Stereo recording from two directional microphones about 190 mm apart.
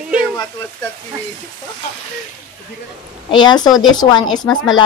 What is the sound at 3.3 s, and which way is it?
Speech, 25° left (ahead or behind).